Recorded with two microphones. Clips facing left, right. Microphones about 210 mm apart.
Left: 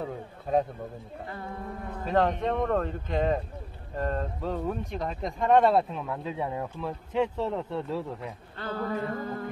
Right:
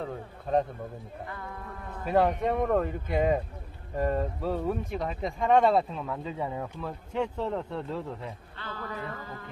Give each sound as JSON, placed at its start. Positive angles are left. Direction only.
{"t": 0.0, "sound": "speech", "side_deg": 5}
{"t": 1.3, "sound": "a sound", "side_deg": 30}
{"t": 2.0, "sound": "speech", "side_deg": -10}
{"t": 8.5, "sound": "music", "side_deg": 40}